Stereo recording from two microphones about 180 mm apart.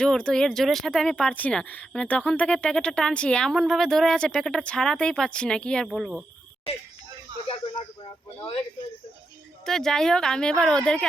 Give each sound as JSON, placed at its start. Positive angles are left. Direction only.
{"t": 0.0, "sound": "speech", "side_deg": 5}
{"t": 8.0, "sound": "speech", "side_deg": 30}
{"t": 9.6, "sound": "speech", "side_deg": 0}